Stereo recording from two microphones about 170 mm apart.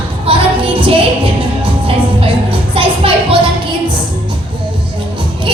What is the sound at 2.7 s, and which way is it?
Music, 30° right (ahead or behind).